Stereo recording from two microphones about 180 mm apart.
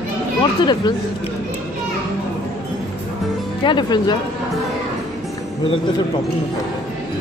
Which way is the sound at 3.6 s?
25° left (ahead or behind).